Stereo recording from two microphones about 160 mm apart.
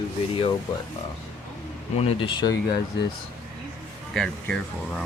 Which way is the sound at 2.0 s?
35° left (ahead or behind).